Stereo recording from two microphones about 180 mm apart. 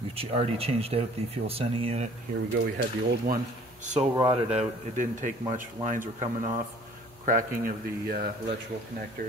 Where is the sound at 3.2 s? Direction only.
45° right (ahead or behind).